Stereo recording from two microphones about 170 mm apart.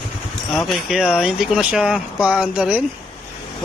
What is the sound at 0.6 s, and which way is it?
Speech, centre (ahead or behind).